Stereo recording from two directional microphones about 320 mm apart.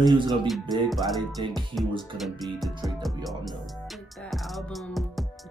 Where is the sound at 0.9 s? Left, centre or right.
Centre.